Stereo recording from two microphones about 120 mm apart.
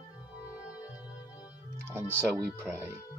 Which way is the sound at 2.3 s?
20° right (ahead or behind).